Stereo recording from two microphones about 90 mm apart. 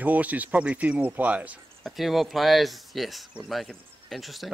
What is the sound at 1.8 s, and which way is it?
Speech, centre (ahead or behind).